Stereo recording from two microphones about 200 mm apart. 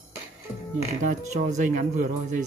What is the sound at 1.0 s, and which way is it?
Speech, 35° right (ahead or behind).